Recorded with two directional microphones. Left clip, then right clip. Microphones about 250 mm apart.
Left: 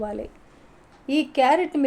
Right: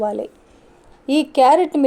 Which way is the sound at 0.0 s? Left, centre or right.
Right.